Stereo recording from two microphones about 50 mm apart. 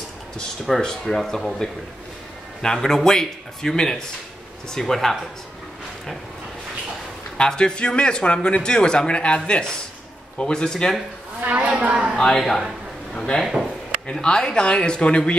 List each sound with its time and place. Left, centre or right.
0.7 s a man's voice: centre
7.3 s speech: centre
11.4 s a man's voice: right
12.2 s speech: centre